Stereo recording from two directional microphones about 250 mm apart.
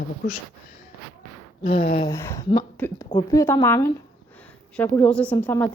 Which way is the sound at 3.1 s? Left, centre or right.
Left.